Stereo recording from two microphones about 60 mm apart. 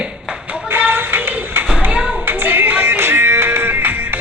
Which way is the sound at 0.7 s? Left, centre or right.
Right.